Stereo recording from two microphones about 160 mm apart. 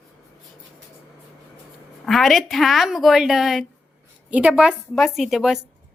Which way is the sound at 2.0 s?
Centre (ahead or behind).